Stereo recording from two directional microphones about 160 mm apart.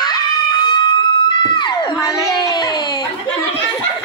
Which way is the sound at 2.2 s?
20° left (ahead or behind).